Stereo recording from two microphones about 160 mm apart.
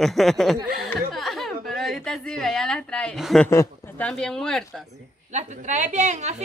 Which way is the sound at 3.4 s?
15° left (ahead or behind).